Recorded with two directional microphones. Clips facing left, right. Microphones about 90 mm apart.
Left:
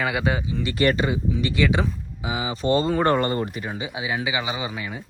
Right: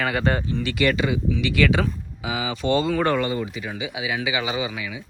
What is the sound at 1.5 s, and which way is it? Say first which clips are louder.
Speech: right 2 dB; 25° left (ahead or behind).